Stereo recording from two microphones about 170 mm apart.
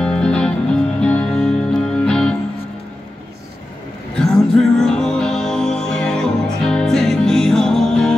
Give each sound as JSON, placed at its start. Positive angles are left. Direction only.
{"t": 0.0, "sound": "music", "side_deg": 5}
{"t": 4.2, "sound": "music", "side_deg": 5}